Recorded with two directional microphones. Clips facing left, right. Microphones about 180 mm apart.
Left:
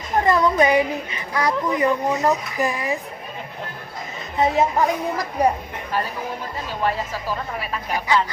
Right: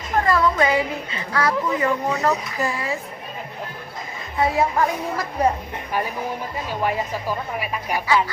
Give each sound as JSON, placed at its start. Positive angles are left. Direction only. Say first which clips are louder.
{"t": 0.3, "sound": "a woman's voice", "louder": "left 3 dB", "side_deg": 20}
{"t": 4.4, "sound": "a woman's voice", "louder": "left 1 dB", "side_deg": 20}
{"t": 6.7, "sound": "speech", "louder": "even", "side_deg": -15}